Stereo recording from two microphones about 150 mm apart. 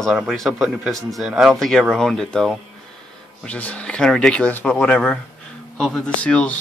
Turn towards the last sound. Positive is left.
turn(degrees=5)  # may be behind; listen again after turning